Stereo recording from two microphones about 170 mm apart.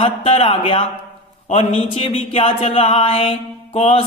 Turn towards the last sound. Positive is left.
turn(degrees=40)  # may be behind; listen again after turning